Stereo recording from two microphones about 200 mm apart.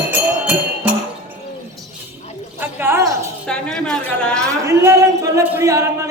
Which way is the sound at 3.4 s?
5° left (ahead or behind).